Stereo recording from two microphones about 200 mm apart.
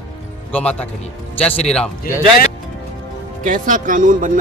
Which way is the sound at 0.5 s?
5° left (ahead or behind).